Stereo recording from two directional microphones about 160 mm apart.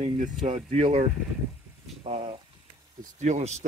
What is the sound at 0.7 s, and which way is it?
Speech, 35° right (ahead or behind).